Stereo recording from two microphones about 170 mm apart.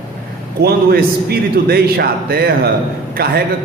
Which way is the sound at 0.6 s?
65° right (ahead or behind).